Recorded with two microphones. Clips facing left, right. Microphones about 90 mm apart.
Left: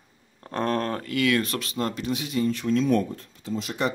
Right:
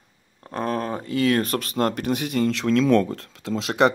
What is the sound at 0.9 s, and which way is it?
Speech, 30° right (ahead or behind).